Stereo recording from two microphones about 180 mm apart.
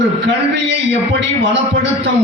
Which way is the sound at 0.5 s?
75° right (ahead or behind).